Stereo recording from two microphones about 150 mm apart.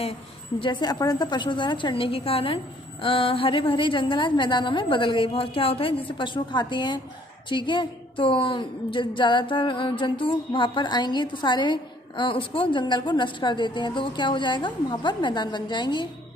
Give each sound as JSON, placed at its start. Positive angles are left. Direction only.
{"t": 0.6, "sound": "a woman's voice", "side_deg": 30}